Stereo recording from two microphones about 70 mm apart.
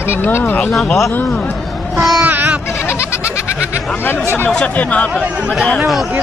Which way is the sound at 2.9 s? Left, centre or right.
Left.